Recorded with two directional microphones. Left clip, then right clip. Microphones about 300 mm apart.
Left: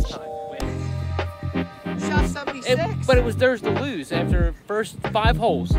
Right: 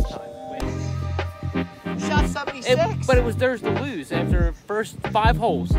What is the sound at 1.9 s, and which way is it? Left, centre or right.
Music, right.